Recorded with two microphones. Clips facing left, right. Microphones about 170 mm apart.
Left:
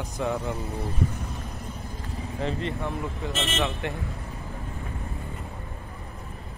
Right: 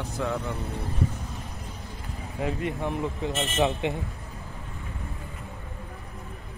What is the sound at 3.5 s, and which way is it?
Speech, 20° right (ahead or behind).